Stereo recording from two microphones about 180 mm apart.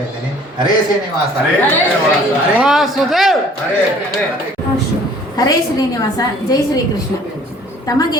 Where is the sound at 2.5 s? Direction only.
Centre (ahead or behind).